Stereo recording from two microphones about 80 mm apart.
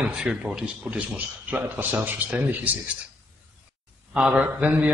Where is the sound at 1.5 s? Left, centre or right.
Right.